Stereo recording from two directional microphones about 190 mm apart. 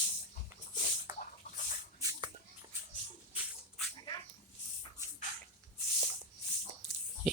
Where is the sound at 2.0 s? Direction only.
15° right (ahead or behind).